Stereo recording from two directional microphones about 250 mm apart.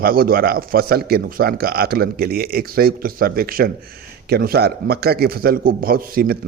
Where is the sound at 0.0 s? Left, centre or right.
Right.